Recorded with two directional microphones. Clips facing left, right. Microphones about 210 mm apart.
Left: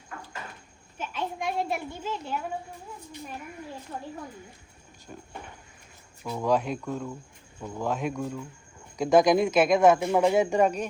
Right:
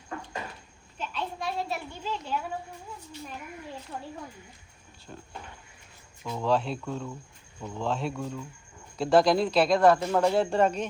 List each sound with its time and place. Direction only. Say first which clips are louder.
1.2 s a child's voice: left 3 dB; 15° left (ahead or behind)
6.2 s speech: left 1 dB; 10° left (ahead or behind)